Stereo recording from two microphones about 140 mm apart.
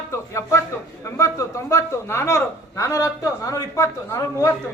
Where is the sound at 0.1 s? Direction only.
20° left (ahead or behind).